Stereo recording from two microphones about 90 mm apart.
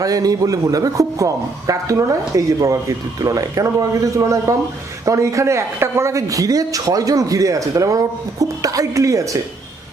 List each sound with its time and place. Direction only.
0.0 s a man's voice: 40° right (ahead or behind)